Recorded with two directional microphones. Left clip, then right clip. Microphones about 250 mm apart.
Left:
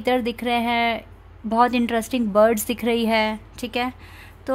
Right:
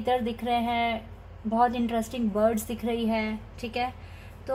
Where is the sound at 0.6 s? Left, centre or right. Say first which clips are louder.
Left 6 dB; left.